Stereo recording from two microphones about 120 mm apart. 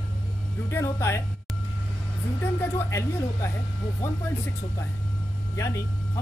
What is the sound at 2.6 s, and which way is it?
Speech, 20° left (ahead or behind).